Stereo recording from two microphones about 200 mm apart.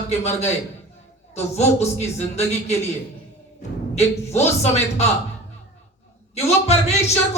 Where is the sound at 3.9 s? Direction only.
35° left (ahead or behind).